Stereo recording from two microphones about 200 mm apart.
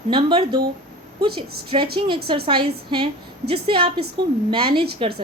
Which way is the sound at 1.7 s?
30° right (ahead or behind).